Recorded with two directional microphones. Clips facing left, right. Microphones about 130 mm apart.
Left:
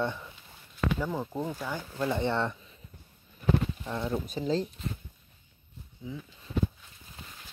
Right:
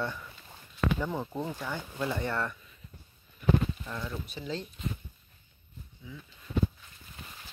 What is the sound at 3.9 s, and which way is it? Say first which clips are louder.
Speech: left 6 dB; 25° left (ahead or behind).